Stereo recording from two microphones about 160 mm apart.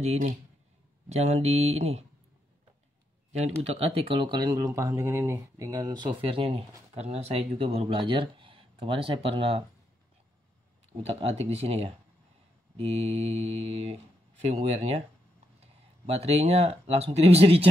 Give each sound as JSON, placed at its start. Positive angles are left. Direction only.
{"t": 0.0, "sound": "speech", "side_deg": -40}
{"t": 3.3, "sound": "speech", "side_deg": -40}
{"t": 11.0, "sound": "speech", "side_deg": -40}